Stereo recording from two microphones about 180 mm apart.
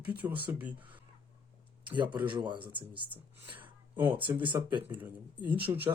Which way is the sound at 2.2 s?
25° right (ahead or behind).